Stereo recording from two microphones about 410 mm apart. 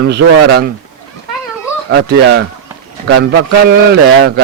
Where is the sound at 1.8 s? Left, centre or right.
Right.